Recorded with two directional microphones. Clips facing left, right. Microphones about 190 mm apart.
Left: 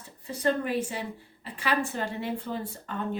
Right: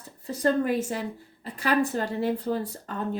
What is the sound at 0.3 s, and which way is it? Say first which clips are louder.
Speech: right 3 dB; 40° right (ahead or behind).